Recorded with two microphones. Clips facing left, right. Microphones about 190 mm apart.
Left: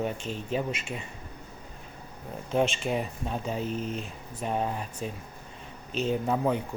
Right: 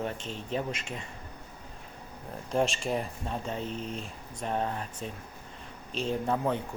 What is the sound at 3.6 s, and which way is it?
Speech, 30° right (ahead or behind).